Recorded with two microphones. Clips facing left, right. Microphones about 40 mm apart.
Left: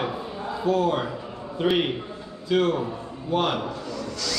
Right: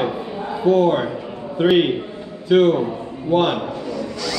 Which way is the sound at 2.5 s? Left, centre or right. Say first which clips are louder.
Right 8 dB; right.